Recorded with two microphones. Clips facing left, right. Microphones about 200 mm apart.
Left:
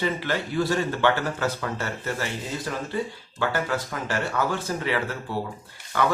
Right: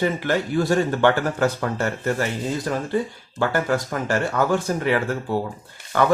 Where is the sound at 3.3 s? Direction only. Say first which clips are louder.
Right 5 dB; 45° right (ahead or behind).